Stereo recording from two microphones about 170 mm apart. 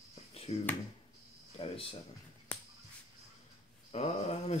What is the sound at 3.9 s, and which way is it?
Speech, 40° left (ahead or behind).